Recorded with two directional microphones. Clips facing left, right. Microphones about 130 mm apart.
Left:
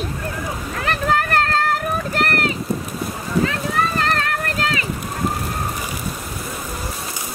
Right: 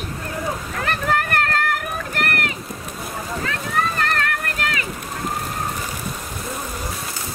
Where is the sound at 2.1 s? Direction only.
35° left (ahead or behind).